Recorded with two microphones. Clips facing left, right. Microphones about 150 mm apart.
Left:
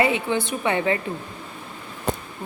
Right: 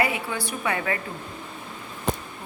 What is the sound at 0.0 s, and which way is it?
Speech, 25° left (ahead or behind).